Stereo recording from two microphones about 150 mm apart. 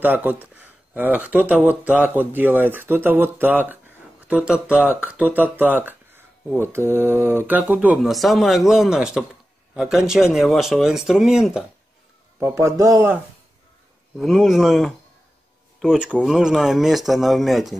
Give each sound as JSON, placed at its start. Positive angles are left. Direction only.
{"t": 0.0, "sound": "speech", "side_deg": -10}
{"t": 8.1, "sound": "speech", "side_deg": 0}
{"t": 12.4, "sound": "speech", "side_deg": -20}
{"t": 14.1, "sound": "speech", "side_deg": 0}